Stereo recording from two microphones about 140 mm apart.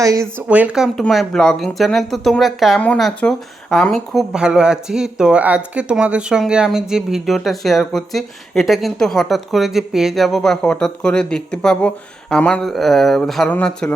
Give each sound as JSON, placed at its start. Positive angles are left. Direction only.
{"t": 0.0, "sound": "speech", "side_deg": -20}
{"t": 0.4, "sound": "speech", "side_deg": -10}
{"t": 0.9, "sound": "speech", "side_deg": 0}